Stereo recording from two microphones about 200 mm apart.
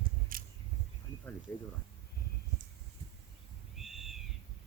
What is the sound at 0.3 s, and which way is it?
Scissors, 45° right (ahead or behind).